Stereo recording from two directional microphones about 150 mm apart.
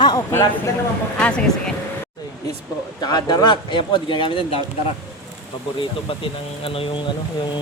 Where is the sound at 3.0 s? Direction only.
25° left (ahead or behind).